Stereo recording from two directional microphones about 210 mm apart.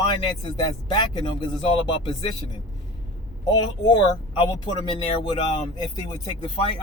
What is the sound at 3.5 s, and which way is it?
Speech, 20° left (ahead or behind).